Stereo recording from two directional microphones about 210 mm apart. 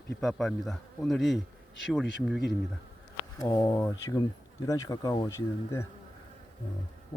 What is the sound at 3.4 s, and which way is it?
Speech, 15° left (ahead or behind).